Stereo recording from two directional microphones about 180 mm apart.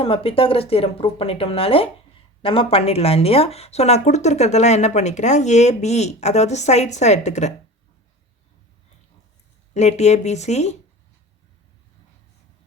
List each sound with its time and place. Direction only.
0.0 s speech: 30° left (ahead or behind)
9.7 s speech: 40° left (ahead or behind)